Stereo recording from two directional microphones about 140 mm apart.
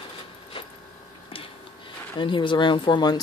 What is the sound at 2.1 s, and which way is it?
Speech, 35° left (ahead or behind).